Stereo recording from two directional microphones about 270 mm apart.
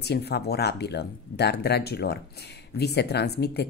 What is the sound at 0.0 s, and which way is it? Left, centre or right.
Speech, left.